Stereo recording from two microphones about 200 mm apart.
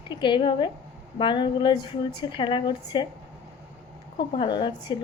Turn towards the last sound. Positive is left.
turn(degrees=25)  # may be behind; listen again after turning